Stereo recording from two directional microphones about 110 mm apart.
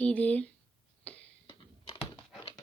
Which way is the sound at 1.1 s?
10° left (ahead or behind).